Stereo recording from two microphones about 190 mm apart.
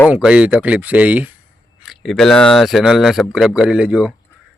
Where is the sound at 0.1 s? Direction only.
5° right (ahead or behind).